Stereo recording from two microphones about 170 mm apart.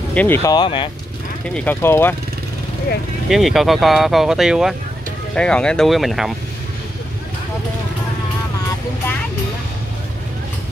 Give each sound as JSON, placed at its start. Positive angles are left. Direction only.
{"t": 0.1, "sound": "speech", "side_deg": 10}
{"t": 0.6, "sound": "speech", "side_deg": 30}
{"t": 1.5, "sound": "speech", "side_deg": 10}
{"t": 3.3, "sound": "speech", "side_deg": 0}